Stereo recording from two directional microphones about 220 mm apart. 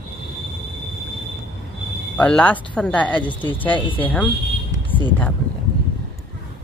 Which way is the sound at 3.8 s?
20° left (ahead or behind).